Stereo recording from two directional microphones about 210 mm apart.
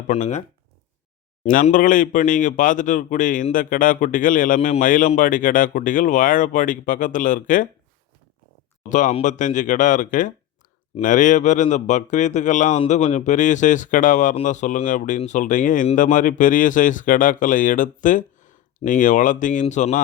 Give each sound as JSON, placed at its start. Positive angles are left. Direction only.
{"t": 0.1, "sound": "speech", "side_deg": 30}
{"t": 1.5, "sound": "speech", "side_deg": 40}
{"t": 8.9, "sound": "speech", "side_deg": 35}